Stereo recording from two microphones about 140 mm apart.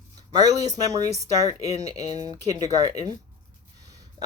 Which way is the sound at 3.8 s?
25° right (ahead or behind).